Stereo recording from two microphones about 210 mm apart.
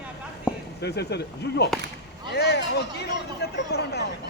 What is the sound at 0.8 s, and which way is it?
Speech, 50° left (ahead or behind).